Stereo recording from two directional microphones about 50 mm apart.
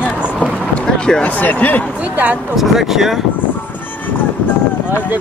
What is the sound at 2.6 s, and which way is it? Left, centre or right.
Speech, centre.